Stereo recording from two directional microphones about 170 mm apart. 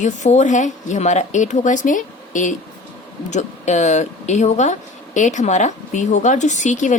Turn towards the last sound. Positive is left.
turn(degrees=45)  # may be behind; listen again after turning